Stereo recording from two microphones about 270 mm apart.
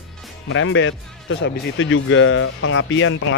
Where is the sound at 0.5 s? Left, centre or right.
Left.